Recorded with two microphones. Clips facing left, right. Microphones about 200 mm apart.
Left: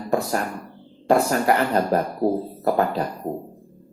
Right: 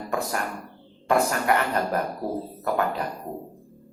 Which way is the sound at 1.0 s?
35° left (ahead or behind).